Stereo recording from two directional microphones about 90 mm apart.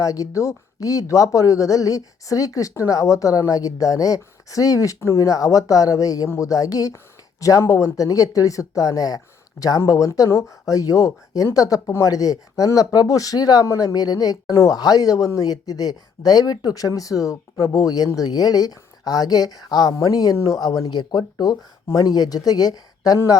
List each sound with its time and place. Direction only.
0.0 s speech: 40° left (ahead or behind)